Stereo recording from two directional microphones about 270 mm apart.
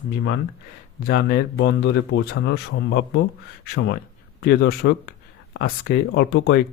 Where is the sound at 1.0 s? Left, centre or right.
Left.